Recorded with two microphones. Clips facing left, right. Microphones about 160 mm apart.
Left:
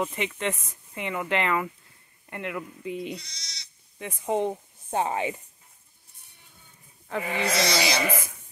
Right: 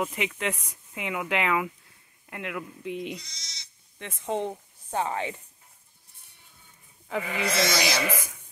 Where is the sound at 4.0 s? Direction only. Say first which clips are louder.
Left 3 dB; 10° left (ahead or behind).